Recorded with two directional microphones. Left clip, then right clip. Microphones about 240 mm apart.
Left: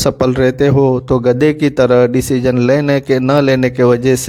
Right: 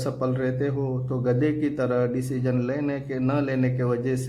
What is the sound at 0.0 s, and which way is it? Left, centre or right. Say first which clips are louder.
Speech: left 14 dB; left.